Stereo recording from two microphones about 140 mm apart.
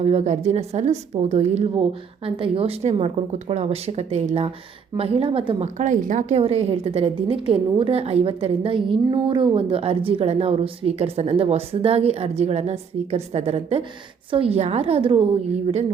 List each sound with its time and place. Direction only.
0.0 s a woman's voice: 50° right (ahead or behind)
6.4 s a woman's voice: 45° right (ahead or behind)